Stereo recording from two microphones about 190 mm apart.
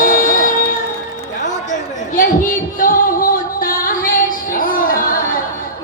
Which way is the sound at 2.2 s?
45° left (ahead or behind).